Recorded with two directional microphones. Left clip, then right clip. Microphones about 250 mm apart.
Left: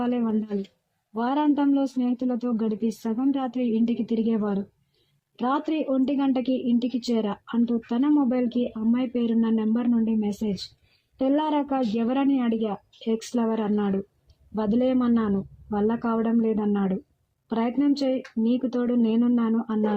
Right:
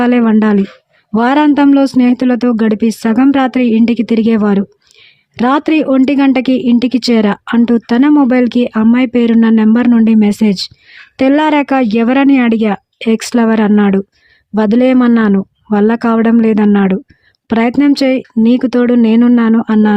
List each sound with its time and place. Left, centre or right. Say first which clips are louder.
0.0 s a woman's voice: right 16 dB; right